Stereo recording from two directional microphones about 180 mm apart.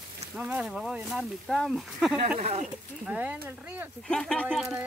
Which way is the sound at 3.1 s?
10° right (ahead or behind).